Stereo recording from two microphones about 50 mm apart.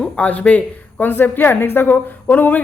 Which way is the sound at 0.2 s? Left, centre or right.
Left.